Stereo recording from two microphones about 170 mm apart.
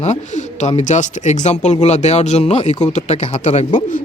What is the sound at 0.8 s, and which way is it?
Speech, 45° left (ahead or behind).